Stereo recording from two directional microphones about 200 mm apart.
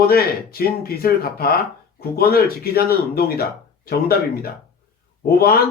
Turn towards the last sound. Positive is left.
turn(degrees=50)  # may be behind; listen again after turning